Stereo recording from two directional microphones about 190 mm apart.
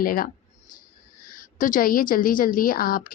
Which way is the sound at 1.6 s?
45° left (ahead or behind).